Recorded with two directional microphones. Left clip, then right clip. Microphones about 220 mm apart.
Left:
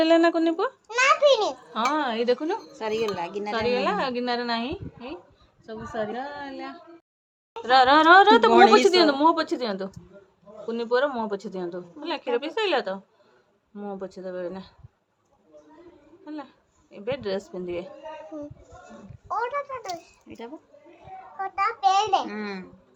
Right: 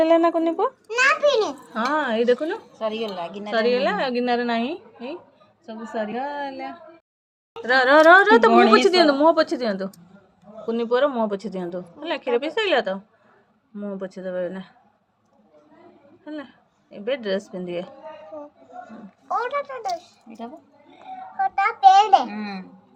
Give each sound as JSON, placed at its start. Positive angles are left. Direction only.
{"t": 0.0, "sound": "a child's voice", "side_deg": 10}
{"t": 1.7, "sound": "a woman's voice", "side_deg": -5}
{"t": 2.7, "sound": "speech", "side_deg": 35}
{"t": 3.5, "sound": "a woman's voice", "side_deg": -5}
{"t": 16.2, "sound": "a woman's voice", "side_deg": -10}
{"t": 19.3, "sound": "a woman's voice", "side_deg": -15}
{"t": 21.3, "sound": "a woman's voice", "side_deg": -15}
{"t": 22.3, "sound": "speech", "side_deg": 25}